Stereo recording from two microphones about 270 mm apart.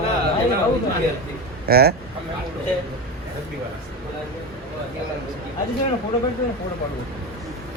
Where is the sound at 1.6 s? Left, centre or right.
Right.